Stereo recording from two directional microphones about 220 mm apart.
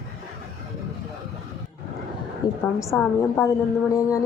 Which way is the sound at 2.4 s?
20° left (ahead or behind).